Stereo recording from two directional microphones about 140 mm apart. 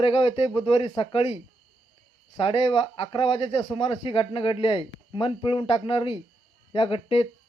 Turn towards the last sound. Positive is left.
turn(degrees=40)  # may be behind; listen again after turning